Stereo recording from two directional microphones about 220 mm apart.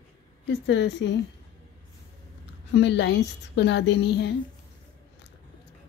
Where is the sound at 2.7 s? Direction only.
55° left (ahead or behind).